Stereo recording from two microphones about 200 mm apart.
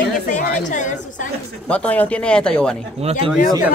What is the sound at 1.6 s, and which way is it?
Speech, 5° left (ahead or behind).